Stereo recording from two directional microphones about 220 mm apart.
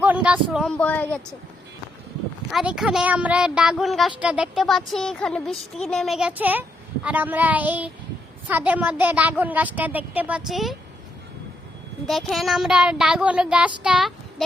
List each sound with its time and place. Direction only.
0.0 s a woman's voice: 5° right (ahead or behind)
2.5 s a woman's voice: centre (ahead or behind)
12.0 s a woman's voice: centre (ahead or behind)